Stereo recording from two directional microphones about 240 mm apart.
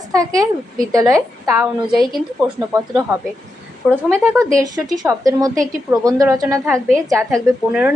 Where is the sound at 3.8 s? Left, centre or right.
Centre.